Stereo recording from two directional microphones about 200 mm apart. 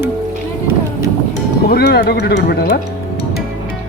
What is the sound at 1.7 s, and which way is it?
Speech, 55° left (ahead or behind).